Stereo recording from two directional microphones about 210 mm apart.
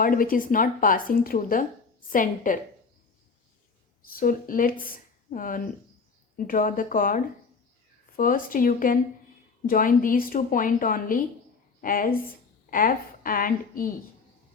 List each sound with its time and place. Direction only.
0.0 s a woman's voice: 40° left (ahead or behind)
4.0 s a woman's voice: 45° left (ahead or behind)